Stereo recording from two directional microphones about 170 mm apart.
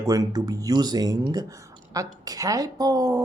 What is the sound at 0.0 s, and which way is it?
Speech, 20° right (ahead or behind).